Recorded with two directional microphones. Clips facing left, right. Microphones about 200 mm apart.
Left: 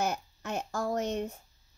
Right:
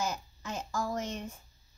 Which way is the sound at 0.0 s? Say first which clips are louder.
Left 3 dB; 65° left (ahead or behind).